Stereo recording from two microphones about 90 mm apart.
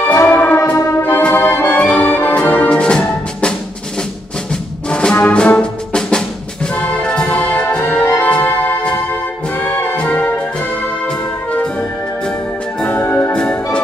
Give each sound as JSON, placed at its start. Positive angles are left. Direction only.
{"t": 0.3, "sound": "music", "side_deg": 20}
{"t": 1.2, "sound": "brass instrument", "side_deg": 20}
{"t": 4.9, "sound": "brass instrument", "side_deg": 15}
{"t": 6.8, "sound": "music", "side_deg": 15}
{"t": 9.6, "sound": "brass instrument", "side_deg": 20}
{"t": 12.8, "sound": "music", "side_deg": 20}